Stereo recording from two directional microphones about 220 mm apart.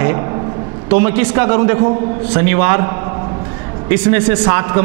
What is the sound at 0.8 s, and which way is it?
A man's voice, 15° right (ahead or behind).